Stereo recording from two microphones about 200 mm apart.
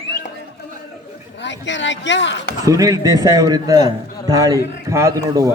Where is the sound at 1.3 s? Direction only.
65° left (ahead or behind).